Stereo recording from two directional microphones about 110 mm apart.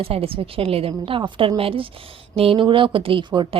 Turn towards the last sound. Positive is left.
turn(degrees=-50)  # may be behind; listen again after turning